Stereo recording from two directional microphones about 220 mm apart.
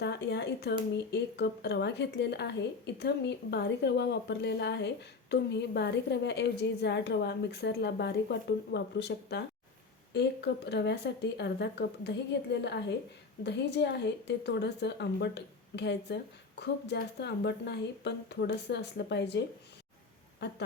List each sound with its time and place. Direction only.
0.0 s a woman's voice: 50° left (ahead or behind)